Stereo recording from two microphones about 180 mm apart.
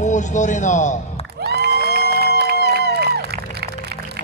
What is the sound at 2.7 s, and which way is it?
Crowd, 65° right (ahead or behind).